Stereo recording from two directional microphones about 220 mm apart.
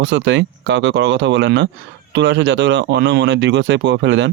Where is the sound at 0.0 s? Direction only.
55° right (ahead or behind).